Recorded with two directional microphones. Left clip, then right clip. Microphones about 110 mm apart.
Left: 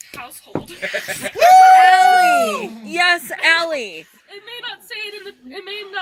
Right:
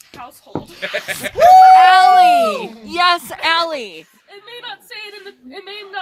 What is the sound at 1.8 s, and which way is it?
Speech, 20° right (ahead or behind).